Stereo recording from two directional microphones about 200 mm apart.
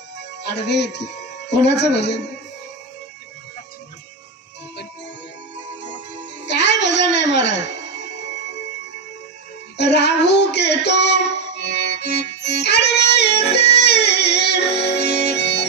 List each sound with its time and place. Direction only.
0.5 s speech: 60° left (ahead or behind)
6.4 s music: 60° left (ahead or behind)
9.7 s child singing: 55° left (ahead or behind)